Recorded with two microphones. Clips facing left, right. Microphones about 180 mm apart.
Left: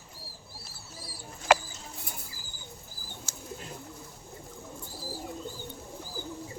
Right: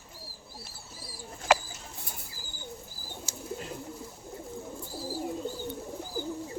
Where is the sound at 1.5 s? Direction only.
65° left (ahead or behind).